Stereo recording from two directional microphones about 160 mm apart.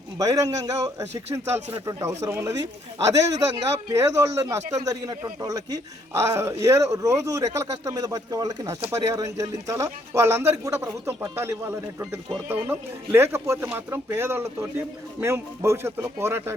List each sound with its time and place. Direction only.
0.2 s a man's voice: 20° right (ahead or behind)